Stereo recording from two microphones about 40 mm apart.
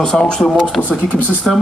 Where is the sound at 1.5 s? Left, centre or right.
Centre.